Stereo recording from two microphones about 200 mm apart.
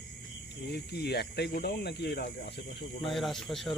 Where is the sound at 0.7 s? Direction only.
55° left (ahead or behind).